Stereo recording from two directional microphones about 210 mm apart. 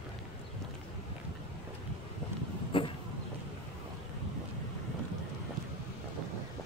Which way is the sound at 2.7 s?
25° left (ahead or behind).